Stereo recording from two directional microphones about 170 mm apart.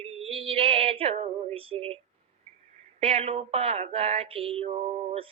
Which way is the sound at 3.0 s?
35° right (ahead or behind).